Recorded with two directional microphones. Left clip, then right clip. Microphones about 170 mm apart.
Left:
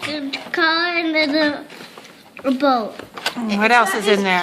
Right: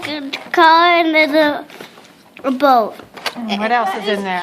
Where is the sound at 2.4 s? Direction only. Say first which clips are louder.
Right 5 dB; 55° right (ahead or behind).